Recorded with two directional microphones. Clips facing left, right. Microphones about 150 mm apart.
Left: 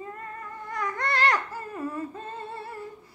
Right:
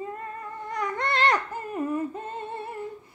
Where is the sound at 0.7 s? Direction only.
20° right (ahead or behind).